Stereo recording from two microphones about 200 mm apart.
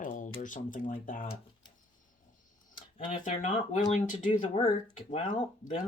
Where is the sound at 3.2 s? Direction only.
40° left (ahead or behind).